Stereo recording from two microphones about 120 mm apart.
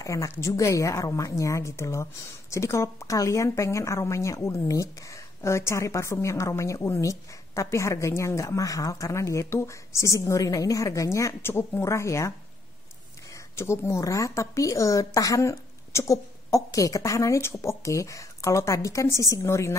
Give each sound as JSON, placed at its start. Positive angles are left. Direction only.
{"t": 0.0, "sound": "a woman's voice", "side_deg": 25}